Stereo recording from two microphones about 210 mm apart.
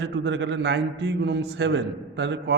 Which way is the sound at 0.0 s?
60° right (ahead or behind).